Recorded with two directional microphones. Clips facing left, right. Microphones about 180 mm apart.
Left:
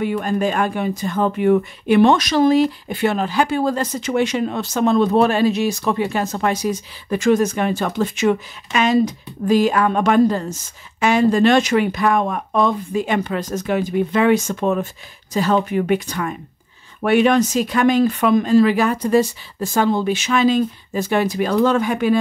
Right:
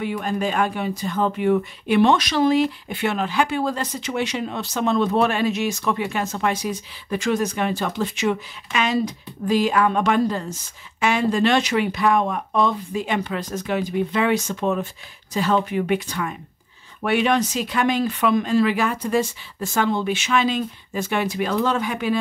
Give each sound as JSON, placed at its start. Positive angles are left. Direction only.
{"t": 0.0, "sound": "speech", "side_deg": 45}